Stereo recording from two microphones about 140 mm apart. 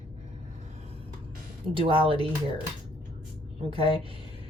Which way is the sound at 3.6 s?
40° right (ahead or behind).